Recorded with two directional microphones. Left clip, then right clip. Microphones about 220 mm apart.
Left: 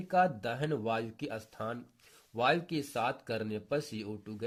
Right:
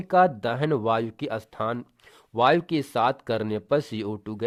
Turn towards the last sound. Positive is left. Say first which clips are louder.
# right 10 dB
turn(degrees=-40)  # may be behind; listen again after turning